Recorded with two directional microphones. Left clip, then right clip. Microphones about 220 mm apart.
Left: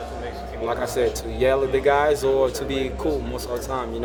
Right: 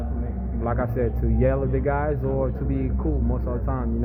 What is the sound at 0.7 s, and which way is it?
Speech, 10° left (ahead or behind).